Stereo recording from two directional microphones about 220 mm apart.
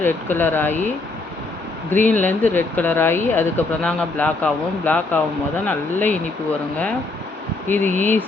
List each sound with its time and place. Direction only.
0.0 s speech: 10° left (ahead or behind)
1.9 s speech: 5° left (ahead or behind)
7.7 s speech: 10° left (ahead or behind)